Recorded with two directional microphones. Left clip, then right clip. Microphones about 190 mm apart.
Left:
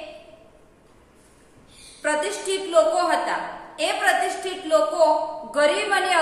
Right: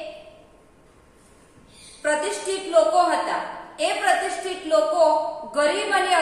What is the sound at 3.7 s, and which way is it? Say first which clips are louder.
A woman's voice: even; 25° left (ahead or behind).